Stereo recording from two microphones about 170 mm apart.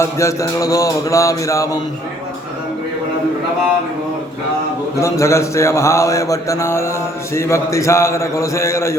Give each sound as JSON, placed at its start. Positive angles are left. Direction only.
{"t": 0.0, "sound": "mantra", "side_deg": 15}
{"t": 4.9, "sound": "mantra", "side_deg": 15}